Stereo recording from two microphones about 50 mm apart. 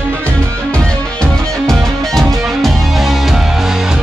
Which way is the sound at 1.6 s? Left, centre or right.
Centre.